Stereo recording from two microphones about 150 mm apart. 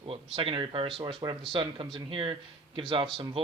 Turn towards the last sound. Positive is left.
turn(degrees=-35)  # may be behind; listen again after turning